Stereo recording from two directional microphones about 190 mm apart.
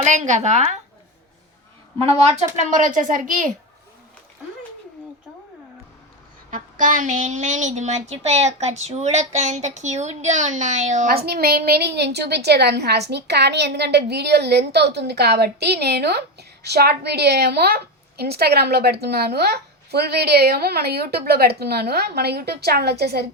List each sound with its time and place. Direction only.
0.0 s a woman's voice: 40° right (ahead or behind)
2.0 s a woman's voice: 35° right (ahead or behind)
6.5 s a woman's voice: 45° right (ahead or behind)